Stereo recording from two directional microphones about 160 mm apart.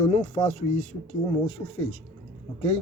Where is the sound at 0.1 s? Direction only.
45° left (ahead or behind).